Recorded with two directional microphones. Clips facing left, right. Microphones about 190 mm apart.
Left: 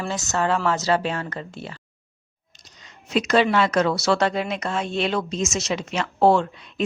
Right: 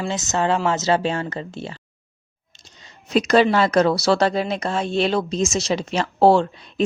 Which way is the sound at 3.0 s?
40° right (ahead or behind).